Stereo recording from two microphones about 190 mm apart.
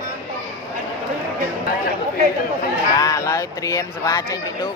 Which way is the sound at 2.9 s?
20° left (ahead or behind).